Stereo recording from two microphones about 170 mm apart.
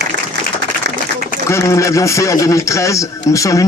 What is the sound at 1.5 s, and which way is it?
Speech, 15° left (ahead or behind).